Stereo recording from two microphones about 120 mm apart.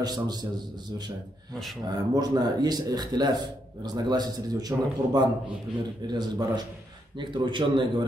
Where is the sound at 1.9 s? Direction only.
35° right (ahead or behind).